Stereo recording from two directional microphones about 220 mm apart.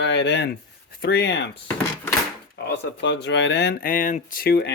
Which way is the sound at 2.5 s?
50° left (ahead or behind).